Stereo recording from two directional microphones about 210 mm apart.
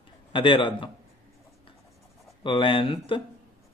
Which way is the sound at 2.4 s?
25° left (ahead or behind).